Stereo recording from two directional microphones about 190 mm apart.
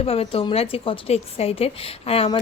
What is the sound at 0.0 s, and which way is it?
A woman's voice, 30° left (ahead or behind).